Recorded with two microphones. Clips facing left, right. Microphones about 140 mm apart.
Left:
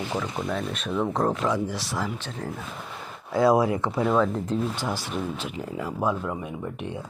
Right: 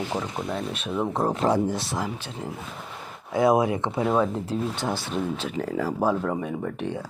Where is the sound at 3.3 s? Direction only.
20° right (ahead or behind).